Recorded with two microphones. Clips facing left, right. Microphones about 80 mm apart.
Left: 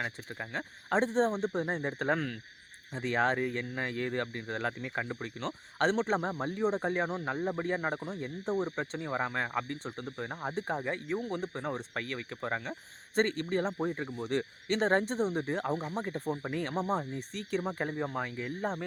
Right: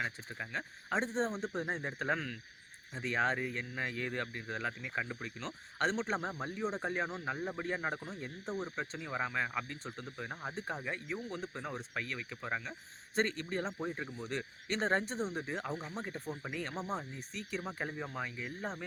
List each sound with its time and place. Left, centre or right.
0.0 s speech: left
7.3 s speech: left
13.7 s speech: left
15.7 s speech: left
16.0 s speech: left
17.6 s speech: left